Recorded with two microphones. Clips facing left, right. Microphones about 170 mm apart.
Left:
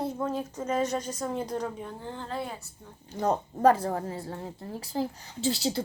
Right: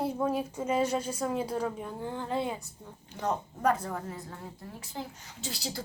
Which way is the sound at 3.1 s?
35° left (ahead or behind).